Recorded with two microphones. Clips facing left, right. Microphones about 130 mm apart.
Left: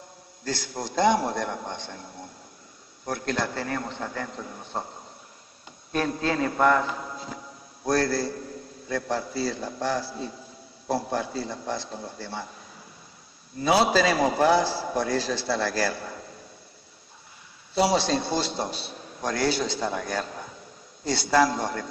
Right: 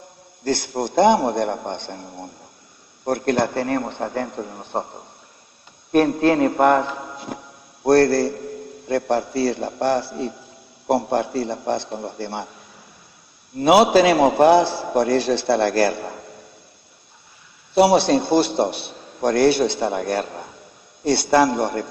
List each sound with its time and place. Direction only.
0.4 s a man's voice: 60° right (ahead or behind)
5.9 s a man's voice: 60° right (ahead or behind)
13.6 s a man's voice: 65° right (ahead or behind)
17.7 s a man's voice: 60° right (ahead or behind)